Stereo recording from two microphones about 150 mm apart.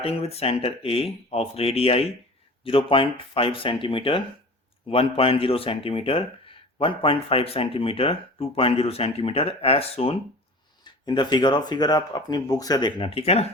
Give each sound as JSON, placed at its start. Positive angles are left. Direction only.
{"t": 0.0, "sound": "speech", "side_deg": 40}
{"t": 10.8, "sound": "speech", "side_deg": 30}